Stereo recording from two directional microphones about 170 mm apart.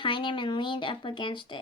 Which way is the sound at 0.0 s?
30° left (ahead or behind).